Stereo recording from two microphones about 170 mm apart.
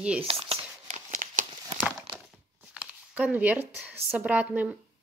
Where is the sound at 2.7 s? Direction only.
10° right (ahead or behind).